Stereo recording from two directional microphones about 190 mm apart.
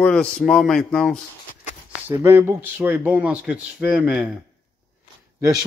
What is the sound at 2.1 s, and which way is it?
Speech, 15° right (ahead or behind).